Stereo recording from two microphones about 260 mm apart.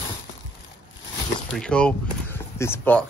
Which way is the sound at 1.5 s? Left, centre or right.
Centre.